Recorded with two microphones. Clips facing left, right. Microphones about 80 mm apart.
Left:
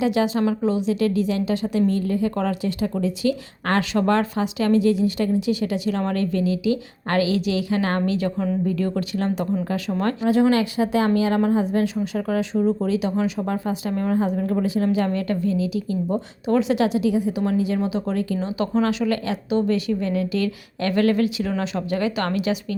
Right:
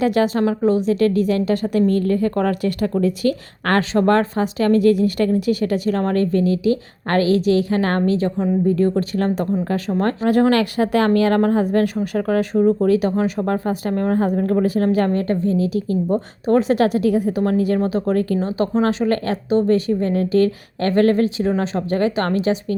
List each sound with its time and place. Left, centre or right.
0.0 s a woman's voice: right